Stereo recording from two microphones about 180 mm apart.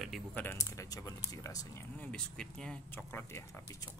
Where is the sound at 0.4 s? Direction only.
15° left (ahead or behind).